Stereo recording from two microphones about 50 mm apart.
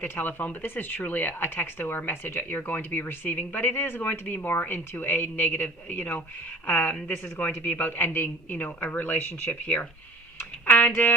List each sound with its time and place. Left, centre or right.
0.0 s speech: left
7.3 s speech: left